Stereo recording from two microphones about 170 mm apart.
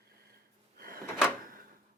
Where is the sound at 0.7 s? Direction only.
60° right (ahead or behind).